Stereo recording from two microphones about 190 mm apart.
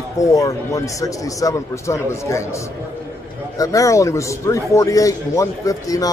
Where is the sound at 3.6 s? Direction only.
15° left (ahead or behind).